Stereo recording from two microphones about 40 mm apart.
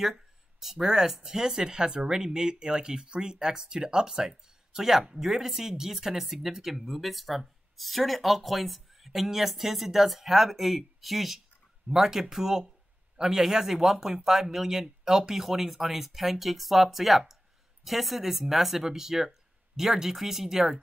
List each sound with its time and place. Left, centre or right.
0.0 s speech: centre